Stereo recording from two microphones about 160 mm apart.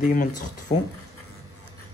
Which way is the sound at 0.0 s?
55° left (ahead or behind).